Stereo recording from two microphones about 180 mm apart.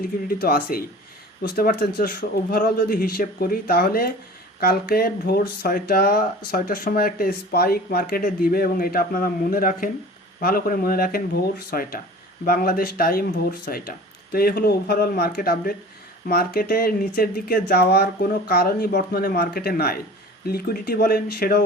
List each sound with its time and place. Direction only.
0.0 s a man's voice: 55° left (ahead or behind)